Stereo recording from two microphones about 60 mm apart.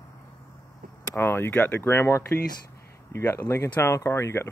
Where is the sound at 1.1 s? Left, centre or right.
Left.